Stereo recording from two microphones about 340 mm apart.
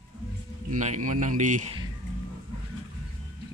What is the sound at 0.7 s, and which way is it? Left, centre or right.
A man's voice, right.